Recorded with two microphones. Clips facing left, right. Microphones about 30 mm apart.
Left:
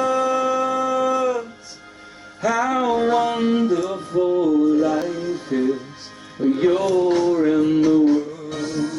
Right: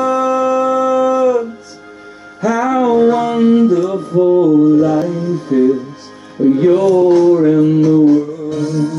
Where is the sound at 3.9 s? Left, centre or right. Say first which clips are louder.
Right 8 dB; centre.